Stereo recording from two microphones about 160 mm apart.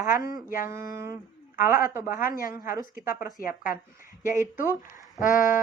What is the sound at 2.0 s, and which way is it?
Speech, 60° left (ahead or behind).